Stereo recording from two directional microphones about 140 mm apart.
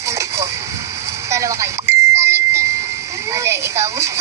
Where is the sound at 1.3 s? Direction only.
20° right (ahead or behind).